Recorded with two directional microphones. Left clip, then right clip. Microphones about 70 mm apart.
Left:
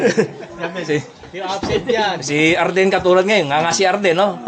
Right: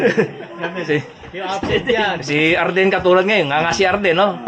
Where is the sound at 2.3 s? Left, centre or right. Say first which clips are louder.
Left 1 dB; left.